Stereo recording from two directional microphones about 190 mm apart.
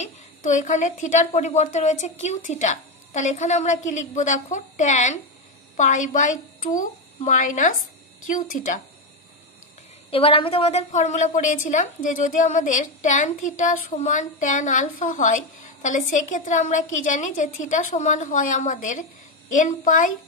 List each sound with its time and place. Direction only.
0.0 s a woman's voice: 40° left (ahead or behind)
10.1 s a woman's voice: 30° left (ahead or behind); by 20.2 s 45° left (ahead or behind)